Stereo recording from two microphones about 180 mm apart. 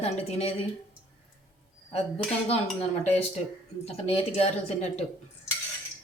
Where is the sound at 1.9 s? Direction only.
30° left (ahead or behind).